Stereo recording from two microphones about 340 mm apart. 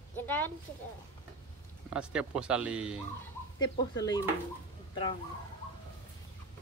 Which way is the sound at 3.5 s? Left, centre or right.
Centre.